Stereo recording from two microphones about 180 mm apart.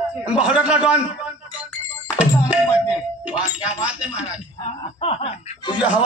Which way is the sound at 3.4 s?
5° right (ahead or behind).